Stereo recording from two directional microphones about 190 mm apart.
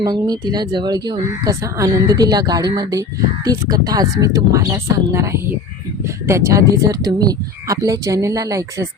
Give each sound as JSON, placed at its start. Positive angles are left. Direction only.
{"t": 0.0, "sound": "speech", "side_deg": -20}